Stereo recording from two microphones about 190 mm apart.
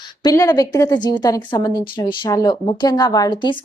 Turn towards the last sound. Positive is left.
turn(degrees=25)  # may be behind; listen again after turning